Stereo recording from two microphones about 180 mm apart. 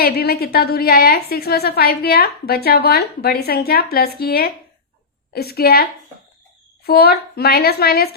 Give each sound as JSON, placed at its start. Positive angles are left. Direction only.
{"t": 0.0, "sound": "a woman's voice", "side_deg": 60}